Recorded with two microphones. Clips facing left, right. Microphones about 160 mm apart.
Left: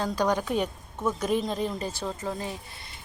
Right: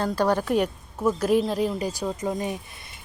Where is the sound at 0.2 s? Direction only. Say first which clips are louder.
Right 4 dB; 5° right (ahead or behind).